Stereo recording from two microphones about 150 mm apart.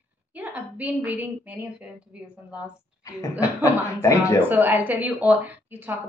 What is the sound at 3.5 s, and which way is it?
Speech, 20° left (ahead or behind).